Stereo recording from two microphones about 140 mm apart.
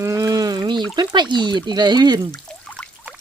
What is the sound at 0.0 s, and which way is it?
Pour, 25° right (ahead or behind).